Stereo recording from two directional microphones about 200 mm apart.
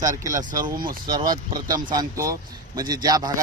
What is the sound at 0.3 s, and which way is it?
Speech, 45° right (ahead or behind).